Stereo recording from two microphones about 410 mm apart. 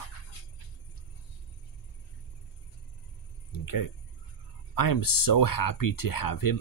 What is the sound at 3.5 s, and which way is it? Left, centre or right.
Speech, left.